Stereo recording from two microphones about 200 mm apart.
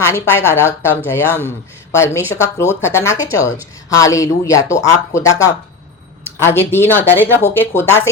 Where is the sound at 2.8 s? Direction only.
15° left (ahead or behind).